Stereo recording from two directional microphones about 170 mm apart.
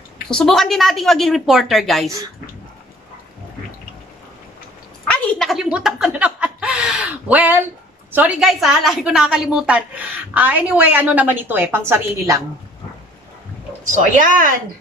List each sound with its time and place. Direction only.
0.3 s a woman's voice: 5° left (ahead or behind)
2.0 s speech: 20° right (ahead or behind)
5.0 s a sound: 5° left (ahead or behind)
8.1 s a woman's voice: 5° right (ahead or behind)
13.8 s speech: 50° right (ahead or behind)